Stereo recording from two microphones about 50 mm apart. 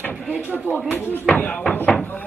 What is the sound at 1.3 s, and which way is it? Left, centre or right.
Speech, left.